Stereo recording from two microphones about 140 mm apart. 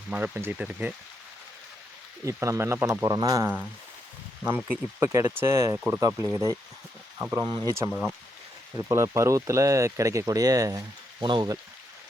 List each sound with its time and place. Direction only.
0.1 s speech: 15° right (ahead or behind)
2.2 s speech: 20° right (ahead or behind)
5.7 s speech: 10° right (ahead or behind)
6.0 s speech: 20° right (ahead or behind)
7.4 s speech: 35° right (ahead or behind)
7.9 s speech: 5° right (ahead or behind)
8.7 s speech: 20° right (ahead or behind)